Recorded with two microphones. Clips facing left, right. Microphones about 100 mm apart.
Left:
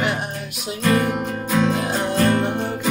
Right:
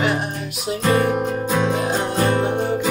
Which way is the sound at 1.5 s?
15° right (ahead or behind).